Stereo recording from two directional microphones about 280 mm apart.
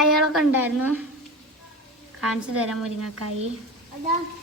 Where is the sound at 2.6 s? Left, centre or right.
Centre.